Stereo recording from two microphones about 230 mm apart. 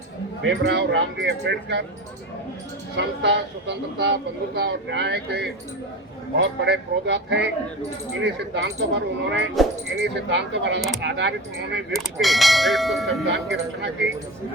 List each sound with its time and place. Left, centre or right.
0.6 s speech: right
2.9 s speech: right
11.9 s clang: centre
13.2 s speech: right